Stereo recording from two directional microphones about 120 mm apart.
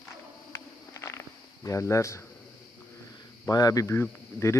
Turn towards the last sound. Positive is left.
turn(degrees=20)  # may be behind; listen again after turning